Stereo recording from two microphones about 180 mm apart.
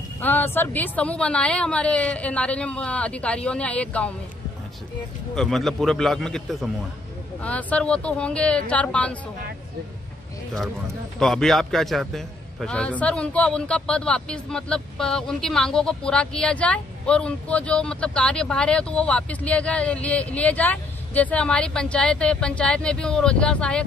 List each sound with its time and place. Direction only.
0.2 s a woman's voice: 10° left (ahead or behind)
5.3 s a man's voice: 5° left (ahead or behind)
11.1 s a man's voice: centre (ahead or behind)